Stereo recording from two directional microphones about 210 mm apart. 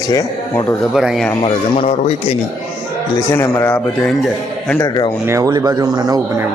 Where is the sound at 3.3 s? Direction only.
15° left (ahead or behind).